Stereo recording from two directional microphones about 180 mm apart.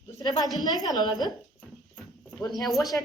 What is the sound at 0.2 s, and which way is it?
A woman's voice, 25° left (ahead or behind).